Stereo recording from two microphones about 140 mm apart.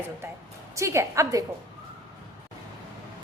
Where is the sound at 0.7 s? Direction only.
20° right (ahead or behind).